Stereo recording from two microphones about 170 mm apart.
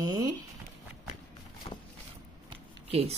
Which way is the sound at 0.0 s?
20° right (ahead or behind).